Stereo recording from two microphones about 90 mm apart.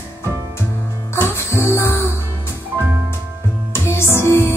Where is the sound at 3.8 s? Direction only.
30° left (ahead or behind).